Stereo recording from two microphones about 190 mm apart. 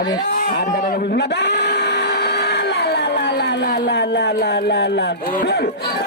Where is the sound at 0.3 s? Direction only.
60° left (ahead or behind).